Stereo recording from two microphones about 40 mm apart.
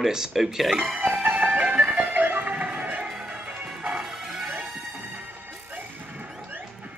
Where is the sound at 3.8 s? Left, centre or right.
Right.